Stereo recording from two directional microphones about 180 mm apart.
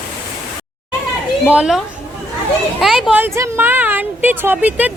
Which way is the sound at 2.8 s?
Centre (ahead or behind).